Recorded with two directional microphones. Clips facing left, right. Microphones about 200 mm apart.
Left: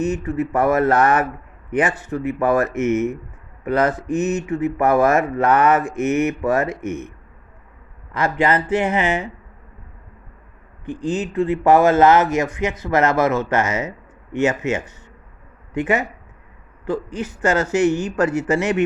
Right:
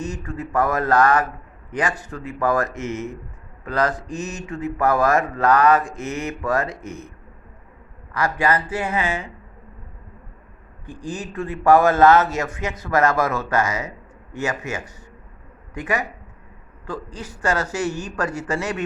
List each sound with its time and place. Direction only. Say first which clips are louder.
0.0 s a man's voice: left 8 dB; 20° left (ahead or behind)
8.1 s a man's voice: left 3 dB; 25° left (ahead or behind)
10.8 s a man's voice: left 8 dB; 20° left (ahead or behind)